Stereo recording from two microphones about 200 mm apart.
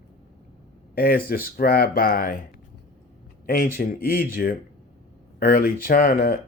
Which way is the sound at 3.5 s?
45° left (ahead or behind).